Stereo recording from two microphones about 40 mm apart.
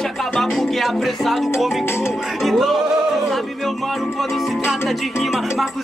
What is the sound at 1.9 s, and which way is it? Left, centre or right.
Music, left.